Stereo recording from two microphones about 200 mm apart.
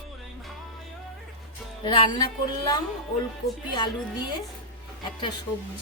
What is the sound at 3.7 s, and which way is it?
Speech, 20° left (ahead or behind).